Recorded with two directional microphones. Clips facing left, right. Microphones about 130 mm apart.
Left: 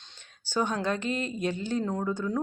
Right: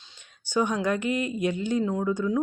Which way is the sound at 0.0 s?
10° right (ahead or behind).